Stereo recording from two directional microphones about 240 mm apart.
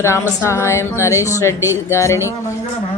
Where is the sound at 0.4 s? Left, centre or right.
Centre.